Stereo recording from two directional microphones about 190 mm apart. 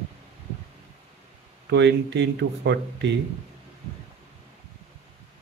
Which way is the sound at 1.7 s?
65° right (ahead or behind).